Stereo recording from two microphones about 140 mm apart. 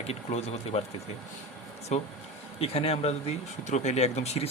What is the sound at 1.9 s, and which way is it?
Speech, 50° left (ahead or behind).